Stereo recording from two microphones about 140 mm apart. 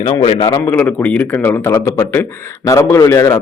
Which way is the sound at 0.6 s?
10° left (ahead or behind).